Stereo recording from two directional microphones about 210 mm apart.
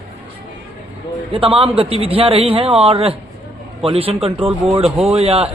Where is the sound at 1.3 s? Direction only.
25° right (ahead or behind).